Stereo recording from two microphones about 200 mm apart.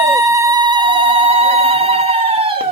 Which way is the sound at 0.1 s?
15° right (ahead or behind).